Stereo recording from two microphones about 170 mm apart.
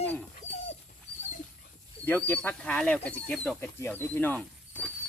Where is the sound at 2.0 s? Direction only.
10° left (ahead or behind).